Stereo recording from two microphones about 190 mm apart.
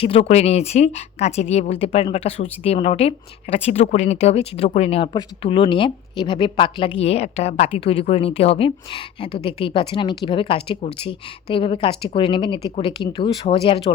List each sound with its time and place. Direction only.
0.0 s speech: 30° left (ahead or behind)